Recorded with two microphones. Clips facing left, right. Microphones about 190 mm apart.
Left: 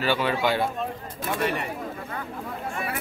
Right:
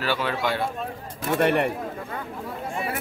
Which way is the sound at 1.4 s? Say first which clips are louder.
Right 7 dB; 60° right (ahead or behind).